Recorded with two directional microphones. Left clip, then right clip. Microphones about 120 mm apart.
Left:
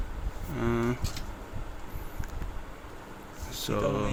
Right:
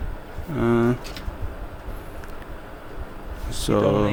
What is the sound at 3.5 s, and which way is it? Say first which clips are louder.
Speech: right 9 dB; 50° right (ahead or behind).